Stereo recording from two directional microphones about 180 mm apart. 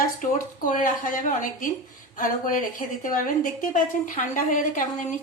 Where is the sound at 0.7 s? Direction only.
45° left (ahead or behind).